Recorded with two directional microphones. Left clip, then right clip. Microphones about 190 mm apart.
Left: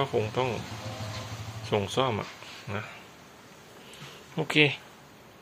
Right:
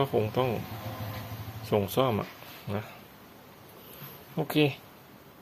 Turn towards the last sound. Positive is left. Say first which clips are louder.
# left 3 dB
turn(degrees=-10)  # may be behind; listen again after turning